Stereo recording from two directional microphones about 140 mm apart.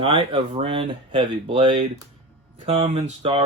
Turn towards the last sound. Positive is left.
turn(degrees=-40)  # may be behind; listen again after turning